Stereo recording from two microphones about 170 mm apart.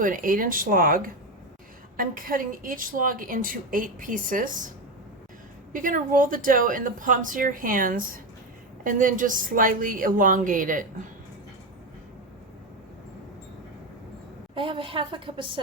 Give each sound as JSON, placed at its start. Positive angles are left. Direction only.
{"t": 0.0, "sound": "a woman's voice", "side_deg": -55}
{"t": 5.7, "sound": "a woman's voice", "side_deg": -50}
{"t": 14.5, "sound": "a woman's voice", "side_deg": -30}